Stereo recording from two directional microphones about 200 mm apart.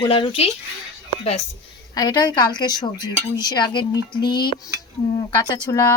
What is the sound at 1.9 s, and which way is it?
Speech, 20° left (ahead or behind).